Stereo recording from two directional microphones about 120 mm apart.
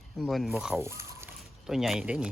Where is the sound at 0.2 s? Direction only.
Centre (ahead or behind).